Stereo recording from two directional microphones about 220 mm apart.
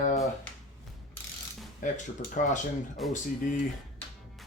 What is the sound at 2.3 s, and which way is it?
Speech, 35° left (ahead or behind).